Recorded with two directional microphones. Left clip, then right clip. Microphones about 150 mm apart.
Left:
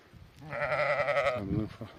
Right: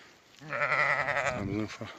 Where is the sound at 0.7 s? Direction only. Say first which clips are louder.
Even; 90° left.